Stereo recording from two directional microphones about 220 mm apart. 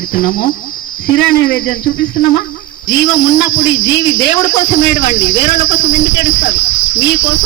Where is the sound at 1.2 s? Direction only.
55° left (ahead or behind).